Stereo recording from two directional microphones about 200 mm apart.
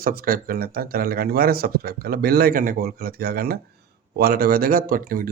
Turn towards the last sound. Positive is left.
turn(degrees=-45)  # may be behind; listen again after turning